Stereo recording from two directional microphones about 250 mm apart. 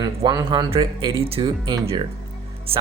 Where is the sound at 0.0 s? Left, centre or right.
Centre.